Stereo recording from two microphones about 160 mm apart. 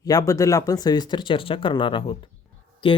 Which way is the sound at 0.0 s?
25° left (ahead or behind).